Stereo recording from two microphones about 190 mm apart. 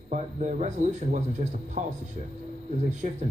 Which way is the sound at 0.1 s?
40° right (ahead or behind).